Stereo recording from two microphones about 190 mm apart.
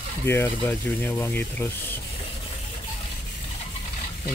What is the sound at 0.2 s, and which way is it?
Speech, 10° left (ahead or behind).